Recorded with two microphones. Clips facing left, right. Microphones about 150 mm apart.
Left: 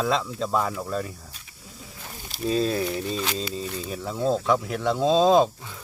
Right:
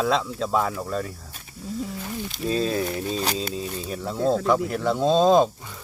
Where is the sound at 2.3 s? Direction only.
Centre (ahead or behind).